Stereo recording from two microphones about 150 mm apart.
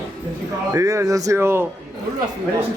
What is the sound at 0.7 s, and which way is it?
Speech, 20° right (ahead or behind).